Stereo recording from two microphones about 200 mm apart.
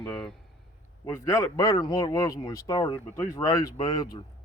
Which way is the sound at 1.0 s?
15° left (ahead or behind).